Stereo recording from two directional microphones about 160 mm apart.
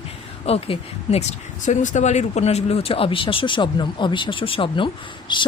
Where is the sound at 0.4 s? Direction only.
40° left (ahead or behind).